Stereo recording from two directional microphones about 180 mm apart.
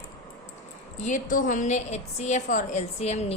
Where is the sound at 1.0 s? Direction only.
45° left (ahead or behind).